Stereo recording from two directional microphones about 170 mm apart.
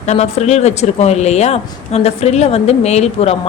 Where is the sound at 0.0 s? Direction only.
40° left (ahead or behind).